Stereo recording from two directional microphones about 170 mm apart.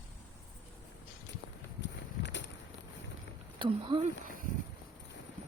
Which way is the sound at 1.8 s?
90° left.